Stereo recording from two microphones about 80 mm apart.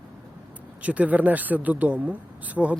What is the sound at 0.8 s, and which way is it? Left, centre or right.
Speech, centre.